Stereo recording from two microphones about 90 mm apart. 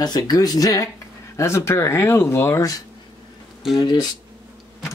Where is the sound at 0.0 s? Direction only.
45° left (ahead or behind).